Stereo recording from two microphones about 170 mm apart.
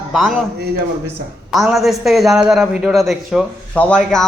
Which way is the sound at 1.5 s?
Centre (ahead or behind).